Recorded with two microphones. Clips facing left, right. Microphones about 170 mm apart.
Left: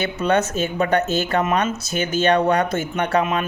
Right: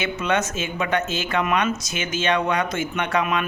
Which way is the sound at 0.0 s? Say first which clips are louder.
Left 4 dB; 35° left (ahead or behind).